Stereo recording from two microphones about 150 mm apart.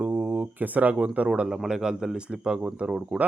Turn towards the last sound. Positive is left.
turn(degrees=-5)  # may be behind; listen again after turning